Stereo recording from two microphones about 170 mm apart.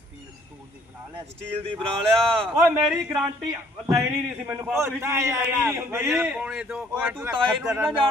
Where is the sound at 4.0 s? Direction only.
10° right (ahead or behind).